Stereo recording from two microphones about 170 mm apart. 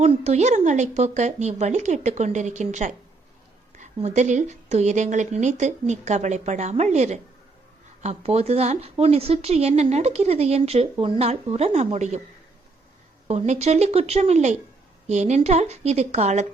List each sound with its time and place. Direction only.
0.0 s speech: 40° right (ahead or behind)
13.2 s speech: 40° right (ahead or behind)